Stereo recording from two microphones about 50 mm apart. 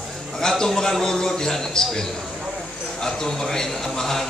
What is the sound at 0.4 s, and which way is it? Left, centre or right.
A man's voice, centre.